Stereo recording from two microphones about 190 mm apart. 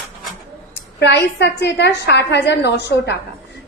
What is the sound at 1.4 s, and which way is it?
A woman's voice, 60° left (ahead or behind).